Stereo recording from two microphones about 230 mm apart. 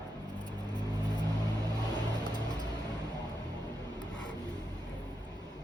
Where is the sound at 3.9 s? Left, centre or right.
Centre.